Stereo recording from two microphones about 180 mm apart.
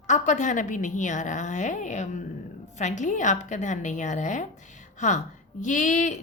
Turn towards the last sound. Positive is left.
turn(degrees=45)  # may be behind; listen again after turning